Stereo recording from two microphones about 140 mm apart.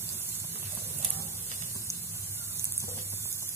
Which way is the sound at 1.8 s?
20° right (ahead or behind).